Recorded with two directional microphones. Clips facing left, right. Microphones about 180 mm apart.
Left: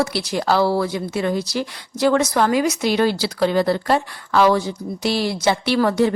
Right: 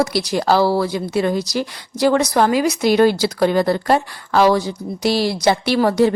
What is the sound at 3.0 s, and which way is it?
Speech, 45° right (ahead or behind).